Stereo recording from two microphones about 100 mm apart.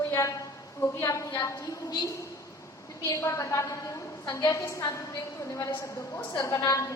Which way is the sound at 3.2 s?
30° left (ahead or behind).